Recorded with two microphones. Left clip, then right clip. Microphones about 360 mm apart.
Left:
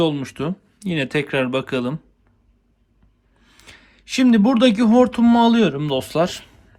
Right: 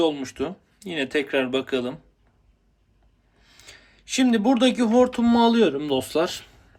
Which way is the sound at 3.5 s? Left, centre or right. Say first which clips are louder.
Left 2 dB; centre.